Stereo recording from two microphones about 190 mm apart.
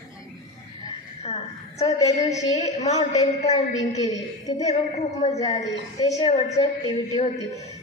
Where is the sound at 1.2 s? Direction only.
35° left (ahead or behind).